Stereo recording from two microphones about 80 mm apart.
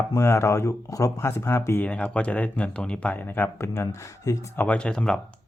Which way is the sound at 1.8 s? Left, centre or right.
Centre.